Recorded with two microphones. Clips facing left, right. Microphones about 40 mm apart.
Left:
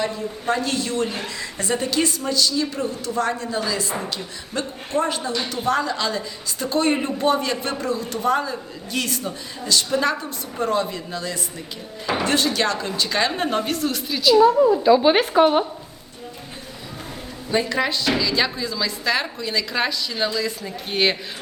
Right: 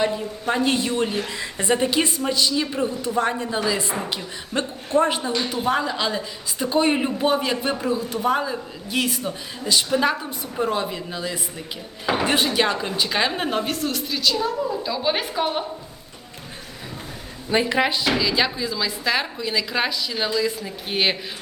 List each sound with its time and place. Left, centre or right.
0.0 s a woman's voice: right; by 14.3 s centre
14.8 s speech: left
17.5 s speech: right; by 21.2 s centre